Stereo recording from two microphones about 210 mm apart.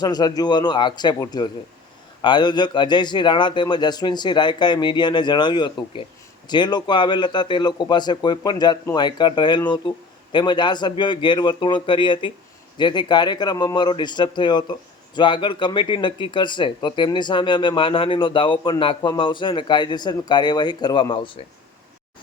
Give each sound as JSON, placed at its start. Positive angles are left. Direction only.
{"t": 0.0, "sound": "speech", "side_deg": 20}